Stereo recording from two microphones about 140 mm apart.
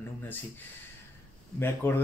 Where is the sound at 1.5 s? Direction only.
15° left (ahead or behind).